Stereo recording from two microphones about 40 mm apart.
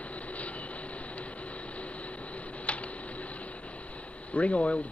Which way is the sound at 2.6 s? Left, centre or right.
Left.